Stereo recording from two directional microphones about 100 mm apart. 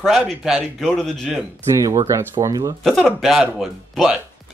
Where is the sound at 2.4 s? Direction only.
35° right (ahead or behind).